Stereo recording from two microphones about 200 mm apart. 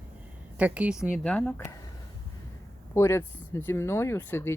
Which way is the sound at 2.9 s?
15° left (ahead or behind).